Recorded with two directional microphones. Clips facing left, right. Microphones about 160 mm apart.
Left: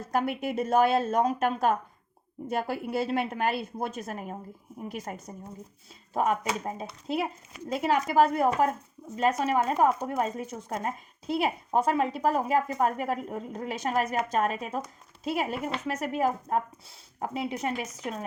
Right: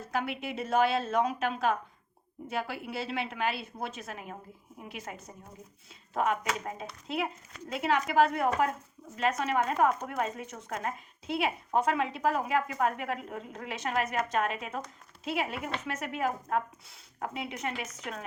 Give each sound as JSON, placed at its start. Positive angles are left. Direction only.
{"t": 0.1, "sound": "a woman's voice", "side_deg": 45}